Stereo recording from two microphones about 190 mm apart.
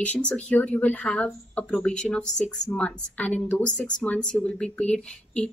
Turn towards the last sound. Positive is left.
turn(degrees=5)  # may be behind; listen again after turning